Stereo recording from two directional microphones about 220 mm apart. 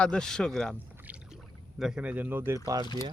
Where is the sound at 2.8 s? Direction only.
20° left (ahead or behind).